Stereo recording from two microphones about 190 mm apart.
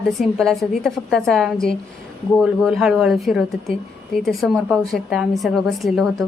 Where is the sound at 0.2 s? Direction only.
Centre (ahead or behind).